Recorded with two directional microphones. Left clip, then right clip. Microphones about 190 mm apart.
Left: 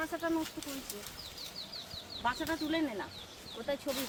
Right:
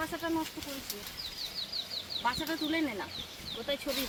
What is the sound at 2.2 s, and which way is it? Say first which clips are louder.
Speech: even; 45° right (ahead or behind).